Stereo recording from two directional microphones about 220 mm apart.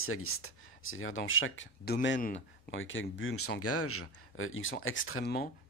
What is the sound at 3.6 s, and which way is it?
Speech, 85° left.